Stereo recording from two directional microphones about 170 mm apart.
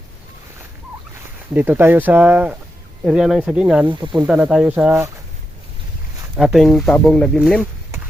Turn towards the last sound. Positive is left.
turn(degrees=0)  # may be behind; listen again after turning